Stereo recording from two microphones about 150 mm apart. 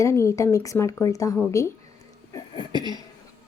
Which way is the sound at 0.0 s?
20° left (ahead or behind).